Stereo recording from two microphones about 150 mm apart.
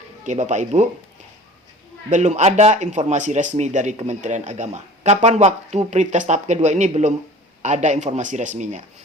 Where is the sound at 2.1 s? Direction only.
50° right (ahead or behind).